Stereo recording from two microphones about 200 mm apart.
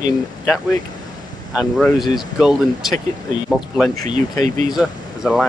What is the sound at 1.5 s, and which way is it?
Speech, 5° right (ahead or behind).